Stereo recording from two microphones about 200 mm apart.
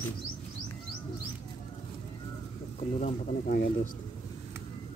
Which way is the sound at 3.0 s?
45° left (ahead or behind).